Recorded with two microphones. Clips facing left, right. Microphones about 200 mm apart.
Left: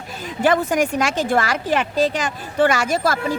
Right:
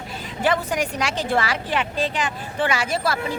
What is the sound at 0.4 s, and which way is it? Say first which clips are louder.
A woman's voice: left 5 dB; 45° left (ahead or behind).